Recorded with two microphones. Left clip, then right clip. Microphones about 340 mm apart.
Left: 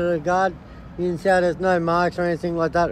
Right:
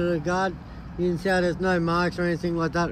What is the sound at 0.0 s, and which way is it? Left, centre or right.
A man's voice, centre.